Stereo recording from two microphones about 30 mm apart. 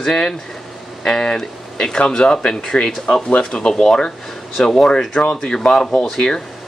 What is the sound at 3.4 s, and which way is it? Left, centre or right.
Speech, left.